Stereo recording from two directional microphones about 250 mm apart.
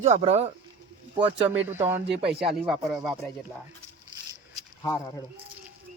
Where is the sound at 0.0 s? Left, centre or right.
Right.